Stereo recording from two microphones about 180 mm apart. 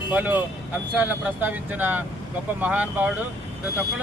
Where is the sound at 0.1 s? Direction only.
10° right (ahead or behind).